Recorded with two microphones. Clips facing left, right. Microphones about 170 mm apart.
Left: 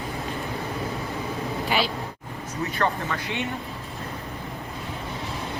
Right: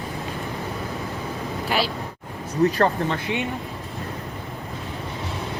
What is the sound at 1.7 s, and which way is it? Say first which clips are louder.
Speech: right 1 dB; centre (ahead or behind).